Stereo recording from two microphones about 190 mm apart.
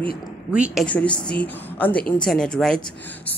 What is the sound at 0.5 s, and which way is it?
Speech, 5° right (ahead or behind).